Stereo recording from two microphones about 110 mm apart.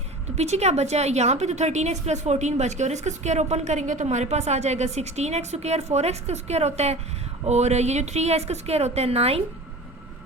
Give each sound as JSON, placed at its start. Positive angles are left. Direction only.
{"t": 0.3, "sound": "a woman's voice", "side_deg": -85}
{"t": 7.4, "sound": "a woman's voice", "side_deg": -90}